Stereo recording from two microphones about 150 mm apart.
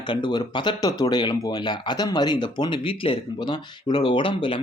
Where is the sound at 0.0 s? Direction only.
30° left (ahead or behind).